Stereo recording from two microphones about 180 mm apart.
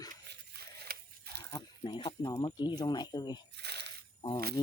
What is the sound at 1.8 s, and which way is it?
Speech, 25° left (ahead or behind).